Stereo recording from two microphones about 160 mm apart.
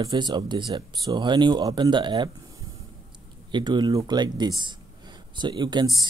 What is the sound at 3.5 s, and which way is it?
Speech, 30° right (ahead or behind).